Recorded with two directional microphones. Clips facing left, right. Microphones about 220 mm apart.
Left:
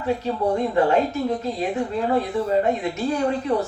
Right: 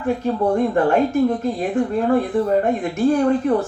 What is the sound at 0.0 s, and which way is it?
Speech, 50° right (ahead or behind).